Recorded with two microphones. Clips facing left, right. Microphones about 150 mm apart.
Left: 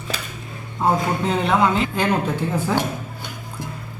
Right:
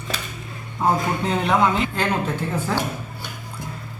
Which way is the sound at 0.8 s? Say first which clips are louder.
Left 1 dB; centre (ahead or behind).